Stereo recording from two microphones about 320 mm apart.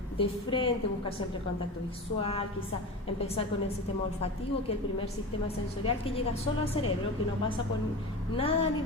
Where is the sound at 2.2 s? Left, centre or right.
Centre.